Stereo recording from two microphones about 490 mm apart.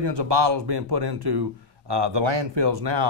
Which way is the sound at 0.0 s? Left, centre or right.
Right.